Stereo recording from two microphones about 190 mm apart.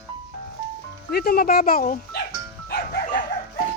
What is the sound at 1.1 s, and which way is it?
Speech, 55° left (ahead or behind).